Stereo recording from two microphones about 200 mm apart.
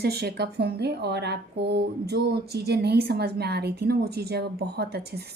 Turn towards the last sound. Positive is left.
turn(degrees=-55)  # may be behind; listen again after turning